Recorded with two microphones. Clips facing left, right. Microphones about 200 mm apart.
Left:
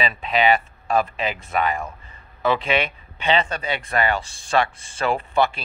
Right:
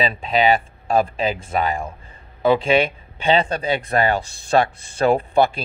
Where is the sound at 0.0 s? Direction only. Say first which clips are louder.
Right 2 dB; 30° right (ahead or behind).